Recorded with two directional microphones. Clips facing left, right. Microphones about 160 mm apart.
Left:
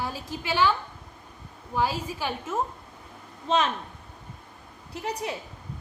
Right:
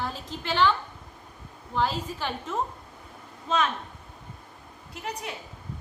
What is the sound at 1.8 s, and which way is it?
Speech, 10° left (ahead or behind).